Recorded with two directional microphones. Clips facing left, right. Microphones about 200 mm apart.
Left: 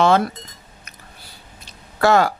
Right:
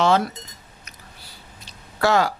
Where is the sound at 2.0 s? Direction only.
50° left (ahead or behind).